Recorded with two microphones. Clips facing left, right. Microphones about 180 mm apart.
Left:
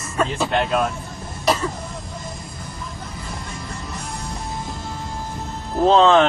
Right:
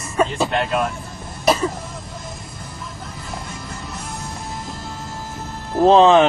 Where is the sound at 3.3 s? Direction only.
Centre (ahead or behind).